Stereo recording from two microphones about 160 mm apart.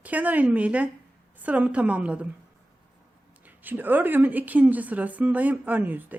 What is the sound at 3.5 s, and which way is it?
Speech, 10° right (ahead or behind).